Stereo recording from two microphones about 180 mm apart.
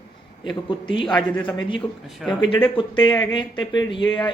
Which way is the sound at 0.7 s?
30° left (ahead or behind).